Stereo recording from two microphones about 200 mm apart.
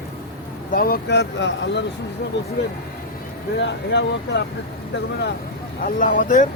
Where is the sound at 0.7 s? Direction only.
45° left (ahead or behind); by 1.8 s 65° left (ahead or behind).